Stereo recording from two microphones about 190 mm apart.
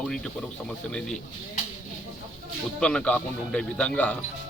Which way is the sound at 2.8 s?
5° left (ahead or behind).